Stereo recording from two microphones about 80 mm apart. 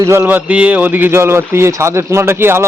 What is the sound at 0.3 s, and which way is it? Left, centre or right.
Speech, centre.